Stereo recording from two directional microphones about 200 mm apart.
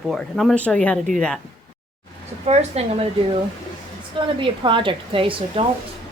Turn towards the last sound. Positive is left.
turn(degrees=-25)  # may be behind; listen again after turning